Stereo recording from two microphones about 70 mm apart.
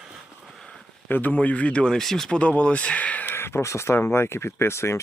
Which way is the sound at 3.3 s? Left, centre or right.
Left.